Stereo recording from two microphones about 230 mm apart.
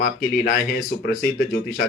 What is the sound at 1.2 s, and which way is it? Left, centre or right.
Speech, left.